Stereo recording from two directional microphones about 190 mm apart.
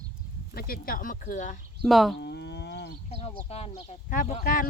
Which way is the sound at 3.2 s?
30° left (ahead or behind).